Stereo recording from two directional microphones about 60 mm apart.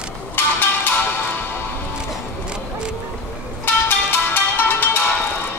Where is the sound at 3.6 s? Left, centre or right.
Left.